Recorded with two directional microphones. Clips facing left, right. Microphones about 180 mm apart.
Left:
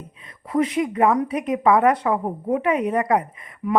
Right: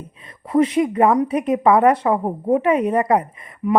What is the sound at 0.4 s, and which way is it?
A woman's voice, 35° right (ahead or behind).